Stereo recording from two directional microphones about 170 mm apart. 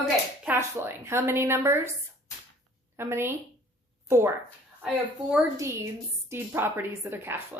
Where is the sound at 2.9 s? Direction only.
15° right (ahead or behind).